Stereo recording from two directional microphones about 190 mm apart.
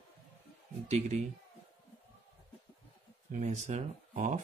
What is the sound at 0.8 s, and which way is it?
Speech, 35° right (ahead or behind).